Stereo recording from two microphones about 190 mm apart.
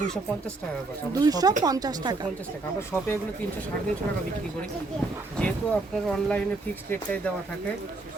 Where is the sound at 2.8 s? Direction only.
15° left (ahead or behind).